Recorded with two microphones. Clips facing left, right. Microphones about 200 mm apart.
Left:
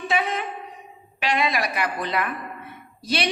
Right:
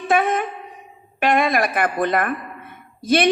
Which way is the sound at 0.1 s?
50° right (ahead or behind).